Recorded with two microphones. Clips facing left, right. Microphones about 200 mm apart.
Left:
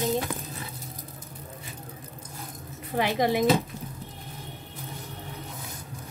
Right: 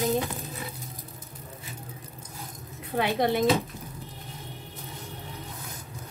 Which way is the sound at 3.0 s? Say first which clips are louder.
Even; centre (ahead or behind).